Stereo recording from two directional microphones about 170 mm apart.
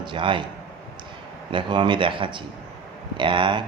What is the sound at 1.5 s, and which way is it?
Speech, 30° right (ahead or behind).